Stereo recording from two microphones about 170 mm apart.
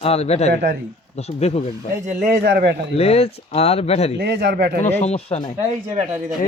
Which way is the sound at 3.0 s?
35° left (ahead or behind).